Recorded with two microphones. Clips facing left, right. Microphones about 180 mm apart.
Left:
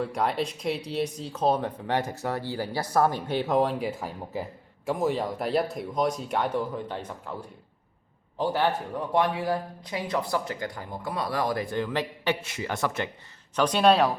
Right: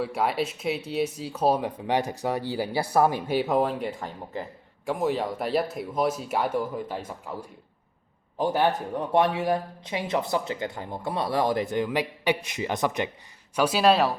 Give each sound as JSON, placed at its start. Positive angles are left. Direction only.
{"t": 0.0, "sound": "speech", "side_deg": -5}
{"t": 8.4, "sound": "speech", "side_deg": -15}
{"t": 13.6, "sound": "speech", "side_deg": -5}